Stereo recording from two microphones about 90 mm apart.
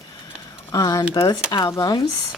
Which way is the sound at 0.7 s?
40° left (ahead or behind).